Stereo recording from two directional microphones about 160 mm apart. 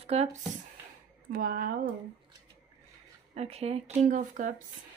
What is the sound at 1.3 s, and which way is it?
Speech, 65° right (ahead or behind).